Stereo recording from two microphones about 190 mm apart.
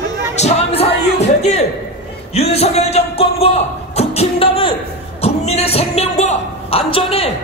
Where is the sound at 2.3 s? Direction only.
35° left (ahead or behind).